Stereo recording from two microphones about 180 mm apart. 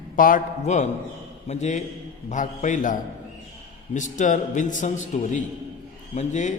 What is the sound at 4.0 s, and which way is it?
A man's voice, 45° left (ahead or behind).